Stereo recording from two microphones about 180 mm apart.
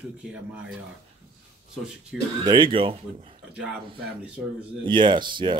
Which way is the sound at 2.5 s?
25° right (ahead or behind).